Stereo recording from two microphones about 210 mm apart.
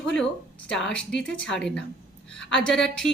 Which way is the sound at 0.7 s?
5° left (ahead or behind).